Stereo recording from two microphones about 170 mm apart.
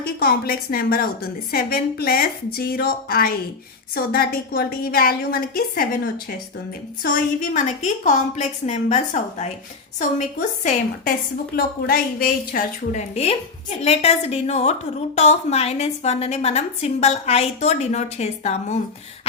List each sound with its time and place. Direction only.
0.0 s a woman's voice: 60° left (ahead or behind)
7.0 s a woman's voice: 50° left (ahead or behind)
11.5 s a woman's voice: 60° left (ahead or behind); by 18.8 s 40° left (ahead or behind)